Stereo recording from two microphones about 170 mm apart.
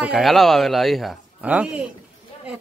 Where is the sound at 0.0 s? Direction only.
Centre (ahead or behind).